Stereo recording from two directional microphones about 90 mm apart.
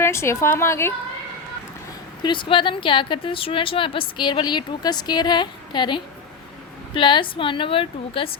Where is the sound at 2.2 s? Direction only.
65° left (ahead or behind).